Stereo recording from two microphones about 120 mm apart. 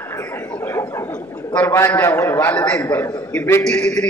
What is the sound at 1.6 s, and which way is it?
A man's voice, 20° left (ahead or behind).